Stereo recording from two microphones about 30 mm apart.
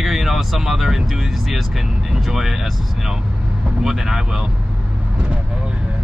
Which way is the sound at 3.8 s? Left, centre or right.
Centre.